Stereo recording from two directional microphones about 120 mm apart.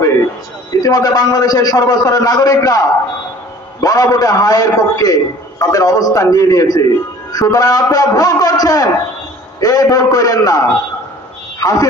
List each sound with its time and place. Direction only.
0.8 s a man's voice: 35° left (ahead or behind)